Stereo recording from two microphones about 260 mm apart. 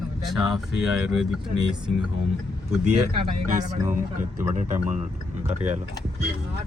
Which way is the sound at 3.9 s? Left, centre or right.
Right.